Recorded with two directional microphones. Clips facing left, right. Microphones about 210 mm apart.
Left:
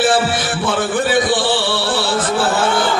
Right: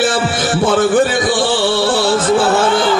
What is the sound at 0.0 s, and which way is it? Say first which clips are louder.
Music: even; 45° right (ahead or behind).